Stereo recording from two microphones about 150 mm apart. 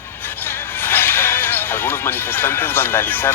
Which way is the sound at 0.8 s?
15° left (ahead or behind).